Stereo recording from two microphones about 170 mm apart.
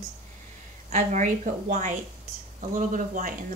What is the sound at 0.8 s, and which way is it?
Speech, 45° right (ahead or behind).